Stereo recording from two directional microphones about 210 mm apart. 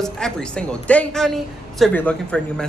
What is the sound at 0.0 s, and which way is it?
A woman's voice, 5° left (ahead or behind).